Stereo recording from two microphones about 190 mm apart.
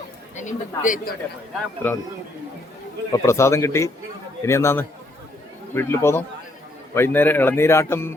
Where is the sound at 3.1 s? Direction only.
15° left (ahead or behind).